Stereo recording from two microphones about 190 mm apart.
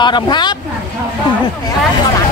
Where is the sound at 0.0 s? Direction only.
25° left (ahead or behind).